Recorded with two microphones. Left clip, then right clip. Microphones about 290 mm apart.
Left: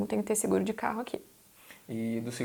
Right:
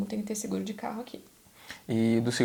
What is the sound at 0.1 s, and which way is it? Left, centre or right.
Speech, left.